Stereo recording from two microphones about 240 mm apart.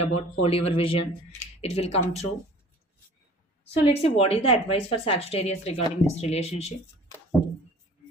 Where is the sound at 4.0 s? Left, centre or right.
Left.